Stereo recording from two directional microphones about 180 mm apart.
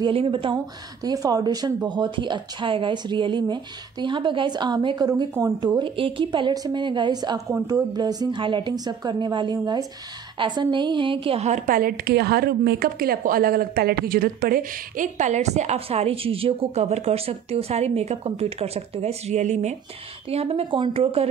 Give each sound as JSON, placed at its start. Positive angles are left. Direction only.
{"t": 0.0, "sound": "a woman's voice", "side_deg": -30}